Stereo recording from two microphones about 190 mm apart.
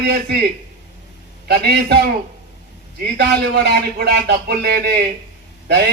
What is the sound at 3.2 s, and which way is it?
Speech, 60° right (ahead or behind).